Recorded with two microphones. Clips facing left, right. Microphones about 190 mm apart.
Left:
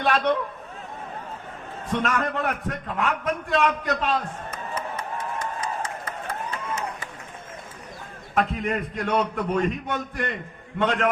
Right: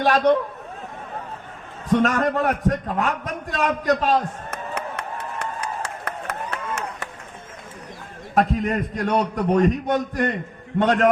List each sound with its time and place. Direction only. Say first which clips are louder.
0.0 s a man's voice: right 5 dB; 40° right (ahead or behind)
1.9 s a man's voice: right 6 dB; 40° right (ahead or behind)
4.7 s a sound: even; 70° right (ahead or behind)
8.4 s a man's voice: right 4 dB; 40° right (ahead or behind)